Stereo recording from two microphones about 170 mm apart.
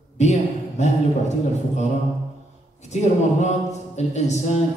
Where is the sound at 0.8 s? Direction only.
40° left (ahead or behind).